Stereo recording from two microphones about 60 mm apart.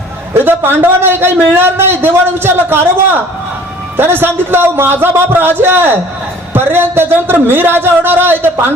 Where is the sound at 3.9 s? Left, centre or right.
Right.